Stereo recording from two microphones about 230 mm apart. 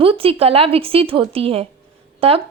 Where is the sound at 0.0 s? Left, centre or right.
Right.